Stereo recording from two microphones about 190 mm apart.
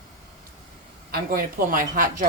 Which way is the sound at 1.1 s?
50° right (ahead or behind).